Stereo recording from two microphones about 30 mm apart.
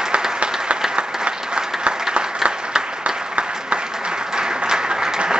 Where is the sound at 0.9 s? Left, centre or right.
Right.